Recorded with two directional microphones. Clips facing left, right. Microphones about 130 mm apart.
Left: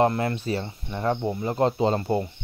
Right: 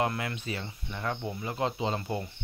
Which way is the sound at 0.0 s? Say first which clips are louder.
Left 8 dB; 35° left (ahead or behind).